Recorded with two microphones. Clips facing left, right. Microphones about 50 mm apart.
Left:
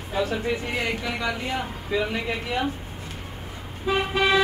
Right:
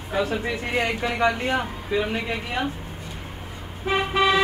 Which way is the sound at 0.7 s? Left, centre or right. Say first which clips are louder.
Right 3 dB; right.